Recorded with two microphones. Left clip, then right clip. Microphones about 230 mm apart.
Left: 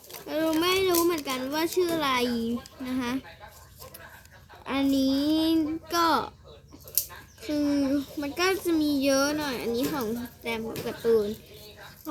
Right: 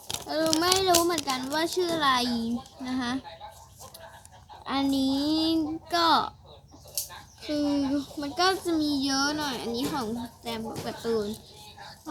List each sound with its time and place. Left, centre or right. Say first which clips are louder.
0.6 s a sound: right 1 dB; centre
2.8 s a child's voice: even; centre
4.6 s a child's voice: left 1 dB; centre
7.4 s a child's voice: left 1 dB; centre
8.9 s a woman's voice: left 4 dB; left
9.2 s a child's voice: left 1 dB; centre